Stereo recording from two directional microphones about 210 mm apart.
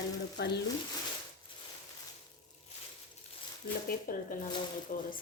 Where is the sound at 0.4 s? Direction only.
50° left (ahead or behind).